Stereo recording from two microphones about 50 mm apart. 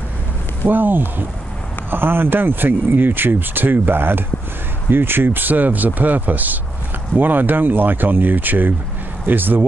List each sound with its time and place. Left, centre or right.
0.7 s speech: right